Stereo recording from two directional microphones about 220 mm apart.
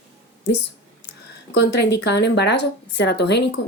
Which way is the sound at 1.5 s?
50° left (ahead or behind).